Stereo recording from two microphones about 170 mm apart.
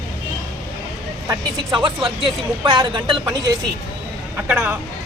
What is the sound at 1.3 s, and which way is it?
Speech, 30° right (ahead or behind).